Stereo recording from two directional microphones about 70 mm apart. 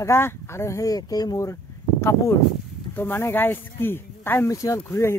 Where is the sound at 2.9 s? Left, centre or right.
Left.